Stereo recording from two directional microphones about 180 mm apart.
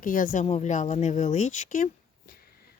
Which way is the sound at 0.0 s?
50° left (ahead or behind).